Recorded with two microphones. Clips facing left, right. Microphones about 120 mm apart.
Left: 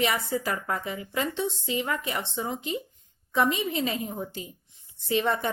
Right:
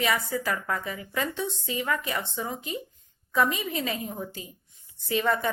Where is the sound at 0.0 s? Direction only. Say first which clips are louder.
Even; 25° left (ahead or behind).